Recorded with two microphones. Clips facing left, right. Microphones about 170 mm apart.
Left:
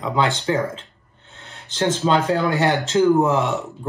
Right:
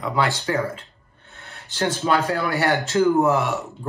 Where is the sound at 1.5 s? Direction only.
20° left (ahead or behind).